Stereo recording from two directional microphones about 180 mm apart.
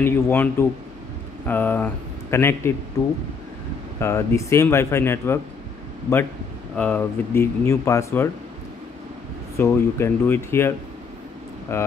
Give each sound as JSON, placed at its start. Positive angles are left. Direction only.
{"t": 0.0, "sound": "speech", "side_deg": 10}
{"t": 4.0, "sound": "speech", "side_deg": 15}
{"t": 6.8, "sound": "speech", "side_deg": 10}
{"t": 9.6, "sound": "speech", "side_deg": 15}
{"t": 11.7, "sound": "speech", "side_deg": 15}